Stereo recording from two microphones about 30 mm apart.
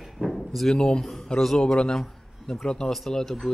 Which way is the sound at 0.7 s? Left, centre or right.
Left.